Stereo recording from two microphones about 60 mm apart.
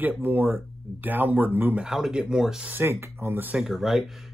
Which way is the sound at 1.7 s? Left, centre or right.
Centre.